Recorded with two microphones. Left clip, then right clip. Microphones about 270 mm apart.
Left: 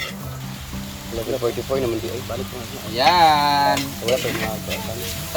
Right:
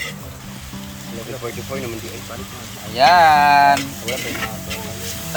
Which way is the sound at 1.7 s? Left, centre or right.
Left.